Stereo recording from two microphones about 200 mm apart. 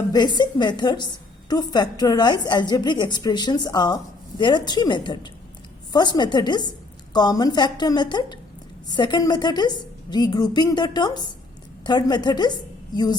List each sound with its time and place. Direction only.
0.1 s a woman's voice: 20° left (ahead or behind)